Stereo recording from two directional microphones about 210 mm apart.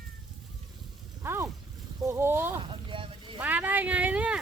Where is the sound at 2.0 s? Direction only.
15° right (ahead or behind).